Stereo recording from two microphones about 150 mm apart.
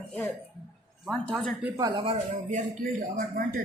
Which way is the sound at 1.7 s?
25° right (ahead or behind).